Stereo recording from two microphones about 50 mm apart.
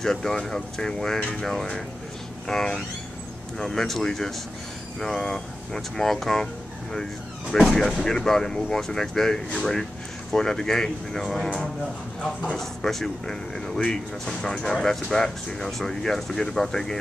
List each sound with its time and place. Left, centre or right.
0.0 s speech: centre
12.5 s speech: centre